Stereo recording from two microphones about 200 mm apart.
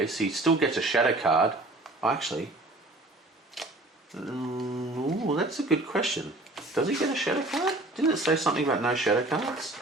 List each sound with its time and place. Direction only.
0.0 s speech: centre (ahead or behind)
3.6 s camera: centre (ahead or behind)
4.4 s mantra: 15° right (ahead or behind)
5.4 s speech: centre (ahead or behind)